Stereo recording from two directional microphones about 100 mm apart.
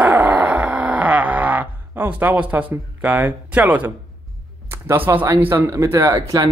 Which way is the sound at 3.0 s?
20° right (ahead or behind).